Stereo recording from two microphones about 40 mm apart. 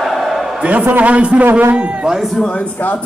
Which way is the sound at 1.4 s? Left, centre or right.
Right.